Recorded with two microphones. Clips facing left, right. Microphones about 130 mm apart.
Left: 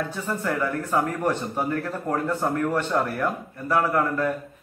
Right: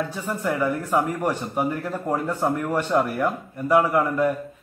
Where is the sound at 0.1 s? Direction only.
10° right (ahead or behind).